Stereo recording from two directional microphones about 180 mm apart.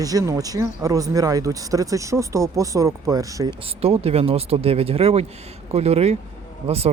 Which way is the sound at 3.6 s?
30° right (ahead or behind).